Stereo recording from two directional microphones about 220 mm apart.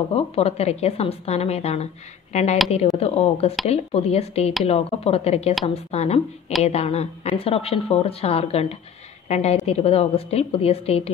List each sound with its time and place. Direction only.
0.1 s a woman's voice: 25° left (ahead or behind)